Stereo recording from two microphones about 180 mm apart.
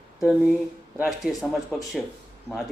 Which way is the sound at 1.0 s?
Centre (ahead or behind).